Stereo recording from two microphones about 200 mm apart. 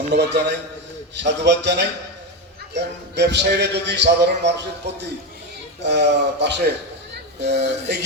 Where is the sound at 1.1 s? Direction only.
60° right (ahead or behind).